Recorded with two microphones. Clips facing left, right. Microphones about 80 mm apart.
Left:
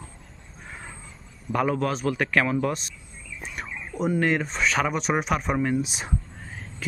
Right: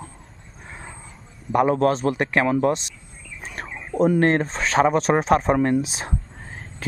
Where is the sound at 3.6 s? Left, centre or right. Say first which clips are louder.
Right 8 dB; right.